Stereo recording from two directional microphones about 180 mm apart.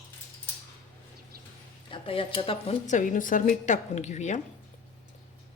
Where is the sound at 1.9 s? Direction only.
30° left (ahead or behind).